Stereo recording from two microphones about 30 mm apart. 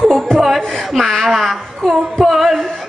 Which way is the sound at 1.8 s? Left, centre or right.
Left.